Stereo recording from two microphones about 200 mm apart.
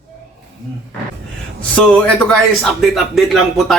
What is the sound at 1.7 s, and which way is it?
Speech, 5° left (ahead or behind).